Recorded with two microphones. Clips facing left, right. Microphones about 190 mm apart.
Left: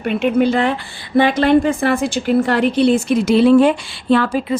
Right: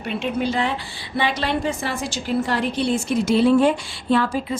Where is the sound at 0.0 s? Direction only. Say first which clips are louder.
Left 8 dB; 55° left (ahead or behind).